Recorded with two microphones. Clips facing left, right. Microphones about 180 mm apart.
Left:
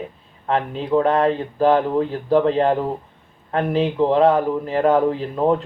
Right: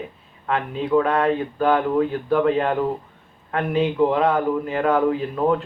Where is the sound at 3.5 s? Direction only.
30° left (ahead or behind).